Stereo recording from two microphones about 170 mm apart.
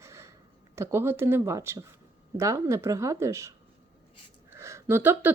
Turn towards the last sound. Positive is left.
turn(degrees=-10)  # may be behind; listen again after turning